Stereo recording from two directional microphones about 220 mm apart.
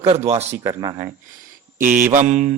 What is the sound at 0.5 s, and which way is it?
Speech, 15° right (ahead or behind).